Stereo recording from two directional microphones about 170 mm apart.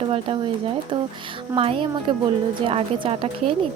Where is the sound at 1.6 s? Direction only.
30° right (ahead or behind).